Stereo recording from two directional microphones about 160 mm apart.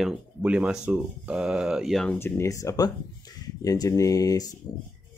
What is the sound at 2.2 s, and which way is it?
Speech, 20° left (ahead or behind).